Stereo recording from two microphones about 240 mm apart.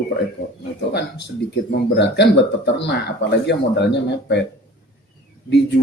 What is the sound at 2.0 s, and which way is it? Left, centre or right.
Speech, left.